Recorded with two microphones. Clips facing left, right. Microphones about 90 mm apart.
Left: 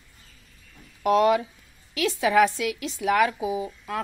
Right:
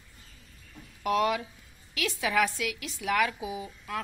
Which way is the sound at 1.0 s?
30° left (ahead or behind).